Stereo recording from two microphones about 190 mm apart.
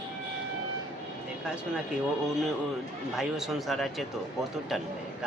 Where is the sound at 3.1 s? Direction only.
Centre (ahead or behind).